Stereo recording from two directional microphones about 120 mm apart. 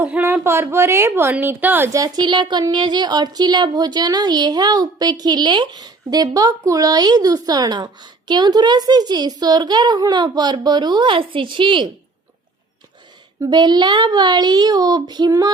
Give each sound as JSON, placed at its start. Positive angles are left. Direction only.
{"t": 0.0, "sound": "a woman's voice", "side_deg": -20}
{"t": 1.9, "sound": "speech", "side_deg": -30}
{"t": 13.4, "sound": "speech", "side_deg": -35}